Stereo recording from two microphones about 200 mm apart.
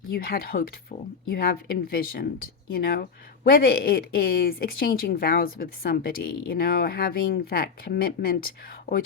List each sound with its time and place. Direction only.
0.1 s speech: 50° left (ahead or behind)